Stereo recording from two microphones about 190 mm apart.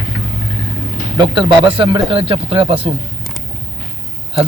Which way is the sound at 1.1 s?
25° right (ahead or behind).